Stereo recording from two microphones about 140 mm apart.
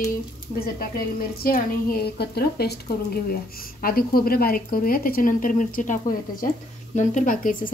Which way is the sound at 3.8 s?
90° left.